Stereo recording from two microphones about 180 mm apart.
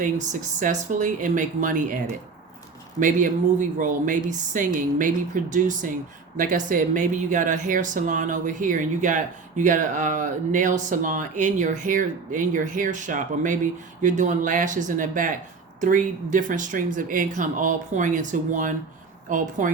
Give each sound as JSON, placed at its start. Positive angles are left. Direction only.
{"t": 0.0, "sound": "speech", "side_deg": -45}
{"t": 3.0, "sound": "speech", "side_deg": -45}